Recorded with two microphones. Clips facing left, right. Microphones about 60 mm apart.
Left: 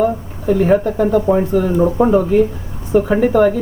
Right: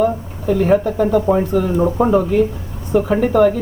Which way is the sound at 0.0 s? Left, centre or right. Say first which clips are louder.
Left 1 dB; centre.